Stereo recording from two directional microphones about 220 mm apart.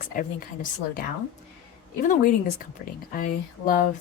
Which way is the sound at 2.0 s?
35° left (ahead or behind).